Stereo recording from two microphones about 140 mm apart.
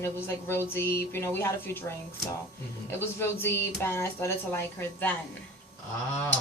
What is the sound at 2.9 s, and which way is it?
A woman's voice, 15° left (ahead or behind).